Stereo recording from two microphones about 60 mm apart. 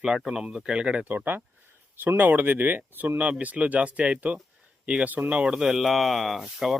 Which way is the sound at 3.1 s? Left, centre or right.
Right.